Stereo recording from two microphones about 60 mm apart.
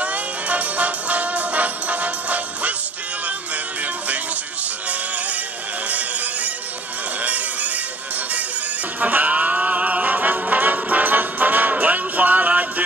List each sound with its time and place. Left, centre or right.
0.0 s music: right
5.9 s music: right
9.0 s music: right